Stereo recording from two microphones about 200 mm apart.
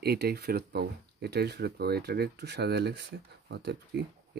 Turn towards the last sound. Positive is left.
turn(degrees=-55)  # may be behind; listen again after turning